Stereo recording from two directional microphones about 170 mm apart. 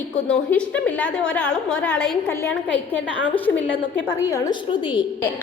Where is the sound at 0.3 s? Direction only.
5° left (ahead or behind); by 5.0 s 25° left (ahead or behind).